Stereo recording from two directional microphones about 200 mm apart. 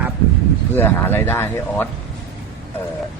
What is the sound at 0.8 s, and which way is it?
Speech, 10° left (ahead or behind).